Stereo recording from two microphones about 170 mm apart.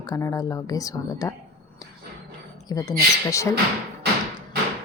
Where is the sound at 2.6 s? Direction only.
20° left (ahead or behind).